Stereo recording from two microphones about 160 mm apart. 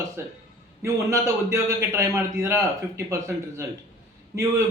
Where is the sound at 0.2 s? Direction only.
15° right (ahead or behind).